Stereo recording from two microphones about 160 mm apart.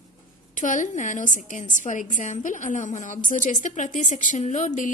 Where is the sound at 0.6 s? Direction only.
50° left (ahead or behind).